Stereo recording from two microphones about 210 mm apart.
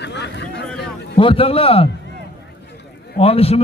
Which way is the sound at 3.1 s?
30° left (ahead or behind).